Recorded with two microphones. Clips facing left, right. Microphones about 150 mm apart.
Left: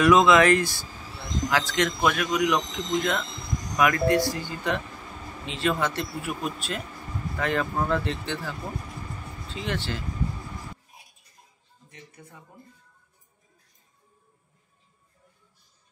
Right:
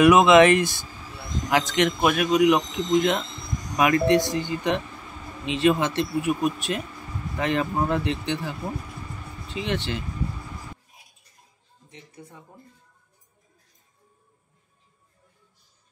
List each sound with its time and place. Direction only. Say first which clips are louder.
0.0 s a man's voice: right 3 dB; 20° right (ahead or behind)
12.2 s speech: right 8 dB; 20° right (ahead or behind)